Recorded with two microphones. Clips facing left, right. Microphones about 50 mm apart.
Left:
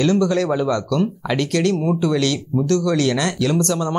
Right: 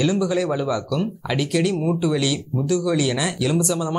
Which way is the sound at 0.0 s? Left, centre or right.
Centre.